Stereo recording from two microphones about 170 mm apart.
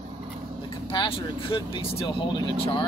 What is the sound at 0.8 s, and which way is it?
Speech, 30° left (ahead or behind).